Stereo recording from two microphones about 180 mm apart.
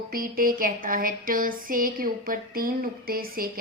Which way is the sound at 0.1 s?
50° right (ahead or behind).